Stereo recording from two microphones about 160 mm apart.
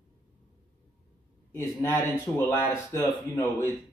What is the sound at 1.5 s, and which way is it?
Speech, 20° left (ahead or behind).